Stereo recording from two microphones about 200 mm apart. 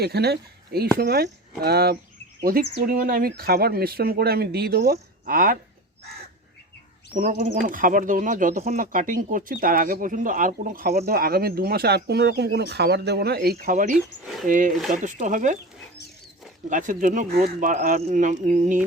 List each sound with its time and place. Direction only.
0.0 s speech: 55° right (ahead or behind)
7.1 s speech: 40° right (ahead or behind)
13.9 s speech: centre (ahead or behind)
14.4 s speech: 40° right (ahead or behind)
16.6 s speech: 40° right (ahead or behind)